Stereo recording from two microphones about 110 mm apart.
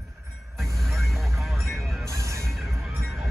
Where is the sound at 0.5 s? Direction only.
Centre (ahead or behind).